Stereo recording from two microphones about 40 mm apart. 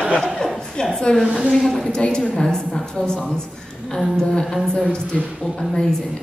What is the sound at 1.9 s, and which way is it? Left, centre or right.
A woman's voice, centre.